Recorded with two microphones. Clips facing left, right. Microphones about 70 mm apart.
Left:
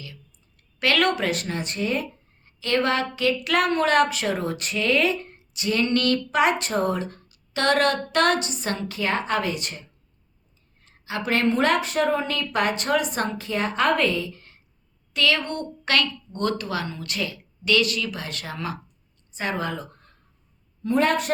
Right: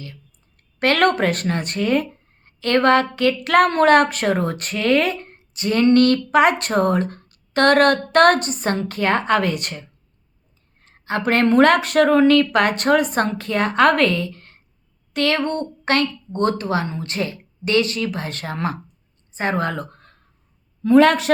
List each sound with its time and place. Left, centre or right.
0.0 s a woman's voice: right
15.1 s a woman's voice: right
20.9 s speech: right